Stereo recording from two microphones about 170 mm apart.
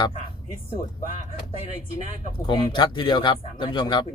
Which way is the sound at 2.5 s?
25° left (ahead or behind).